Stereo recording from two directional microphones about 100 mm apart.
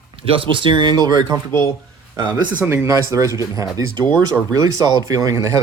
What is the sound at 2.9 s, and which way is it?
A man's voice, 30° right (ahead or behind).